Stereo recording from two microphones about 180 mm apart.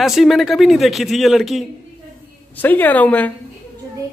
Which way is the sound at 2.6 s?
10° left (ahead or behind).